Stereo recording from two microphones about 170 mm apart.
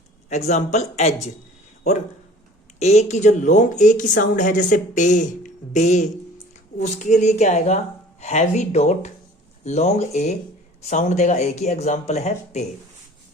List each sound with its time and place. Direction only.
0.3 s speech: 45° left (ahead or behind)
2.7 s speech: 40° left (ahead or behind)